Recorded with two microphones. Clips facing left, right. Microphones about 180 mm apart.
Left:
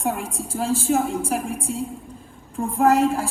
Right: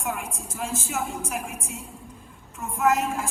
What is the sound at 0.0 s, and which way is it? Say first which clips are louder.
A woman's voice: left 6 dB; 35° left (ahead or behind).